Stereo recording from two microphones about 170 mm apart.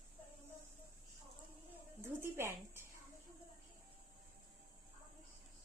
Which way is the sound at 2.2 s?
15° right (ahead or behind).